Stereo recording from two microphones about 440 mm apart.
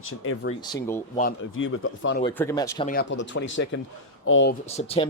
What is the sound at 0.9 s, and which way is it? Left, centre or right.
Speech, centre.